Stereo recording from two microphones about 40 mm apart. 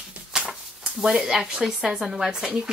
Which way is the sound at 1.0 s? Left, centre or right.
Centre.